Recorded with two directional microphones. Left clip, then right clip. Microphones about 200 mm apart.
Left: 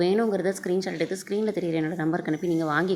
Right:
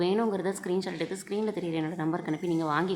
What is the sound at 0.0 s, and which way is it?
A woman's voice, 20° left (ahead or behind).